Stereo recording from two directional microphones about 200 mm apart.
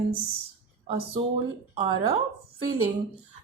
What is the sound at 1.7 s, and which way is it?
Speech, 25° right (ahead or behind).